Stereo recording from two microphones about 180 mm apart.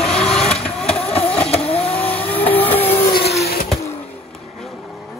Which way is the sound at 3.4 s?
55° left (ahead or behind).